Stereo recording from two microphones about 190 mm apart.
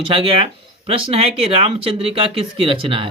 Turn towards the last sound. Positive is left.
turn(degrees=-30)  # may be behind; listen again after turning